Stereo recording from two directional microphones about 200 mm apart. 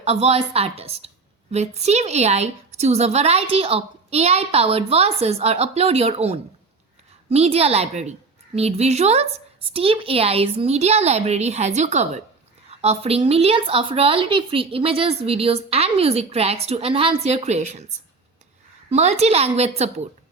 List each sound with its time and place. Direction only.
0.0 s a woman's voice: 30° right (ahead or behind)